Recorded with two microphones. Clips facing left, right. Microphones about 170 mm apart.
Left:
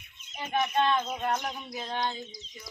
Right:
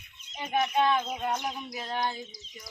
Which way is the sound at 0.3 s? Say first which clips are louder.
Right 1 dB; 10° right (ahead or behind).